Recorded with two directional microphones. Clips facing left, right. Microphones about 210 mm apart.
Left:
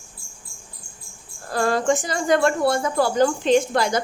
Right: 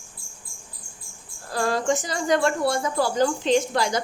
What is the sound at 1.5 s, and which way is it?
Speech, 55° left (ahead or behind).